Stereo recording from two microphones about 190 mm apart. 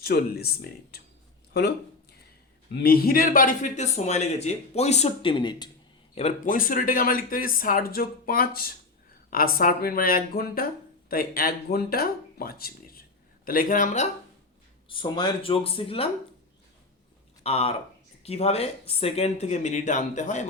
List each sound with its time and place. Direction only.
0.0 s speech: 55° left (ahead or behind)
2.7 s a man's voice: 50° left (ahead or behind); by 5.7 s 25° left (ahead or behind)
6.1 s speech: 40° left (ahead or behind)
14.8 s speech: 25° left (ahead or behind)
17.4 s a man's voice: 35° left (ahead or behind)